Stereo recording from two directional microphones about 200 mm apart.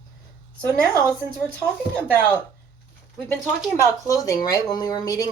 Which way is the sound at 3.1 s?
5° left (ahead or behind).